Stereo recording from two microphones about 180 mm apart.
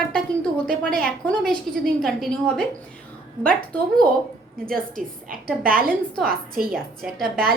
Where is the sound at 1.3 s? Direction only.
Centre (ahead or behind).